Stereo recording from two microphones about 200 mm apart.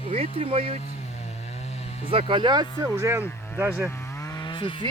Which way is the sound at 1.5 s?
30° left (ahead or behind).